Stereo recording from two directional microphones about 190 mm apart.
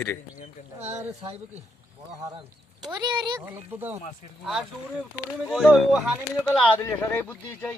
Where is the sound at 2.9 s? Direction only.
25° right (ahead or behind).